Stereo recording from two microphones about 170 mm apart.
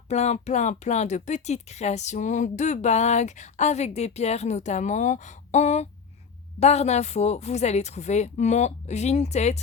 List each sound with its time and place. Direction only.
0.1 s speech: 40° left (ahead or behind)